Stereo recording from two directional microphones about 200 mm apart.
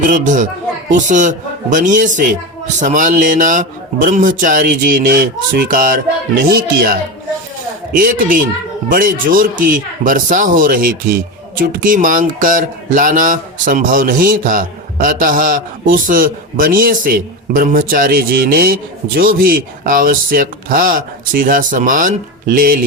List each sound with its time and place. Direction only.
0.0 s a man's voice: 40° right (ahead or behind)